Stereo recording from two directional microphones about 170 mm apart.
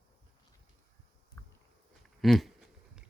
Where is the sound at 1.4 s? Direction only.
15° left (ahead or behind).